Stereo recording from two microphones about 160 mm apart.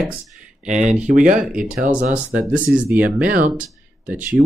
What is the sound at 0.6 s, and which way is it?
Speech, 50° right (ahead or behind).